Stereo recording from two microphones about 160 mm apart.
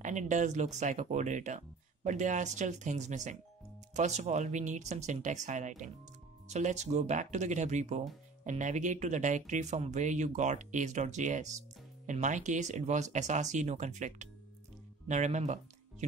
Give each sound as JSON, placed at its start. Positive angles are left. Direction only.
{"t": 0.0, "sound": "speech", "side_deg": -50}